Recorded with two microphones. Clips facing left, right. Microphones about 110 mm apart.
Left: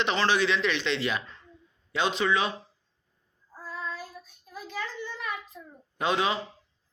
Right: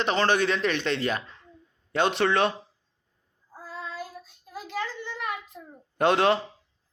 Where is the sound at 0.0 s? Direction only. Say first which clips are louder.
Right 2 dB; 45° right (ahead or behind); by 2.5 s 65° right (ahead or behind).